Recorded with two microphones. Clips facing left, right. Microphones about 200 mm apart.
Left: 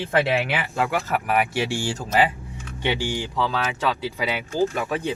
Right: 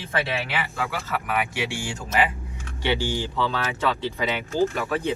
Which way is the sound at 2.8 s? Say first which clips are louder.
Even; 15° left (ahead or behind).